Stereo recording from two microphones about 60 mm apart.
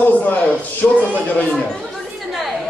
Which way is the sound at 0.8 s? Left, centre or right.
Centre.